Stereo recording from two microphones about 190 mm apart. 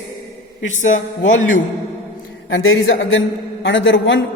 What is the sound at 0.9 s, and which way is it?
Speech, 90° left.